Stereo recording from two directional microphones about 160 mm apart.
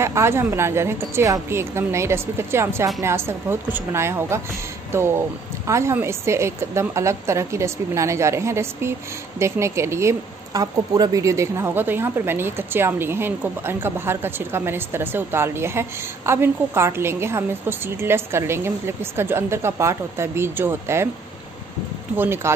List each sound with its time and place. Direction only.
0.0 s speech: 15° right (ahead or behind)
5.7 s speech: 15° right (ahead or behind)
22.1 s speech: 15° right (ahead or behind)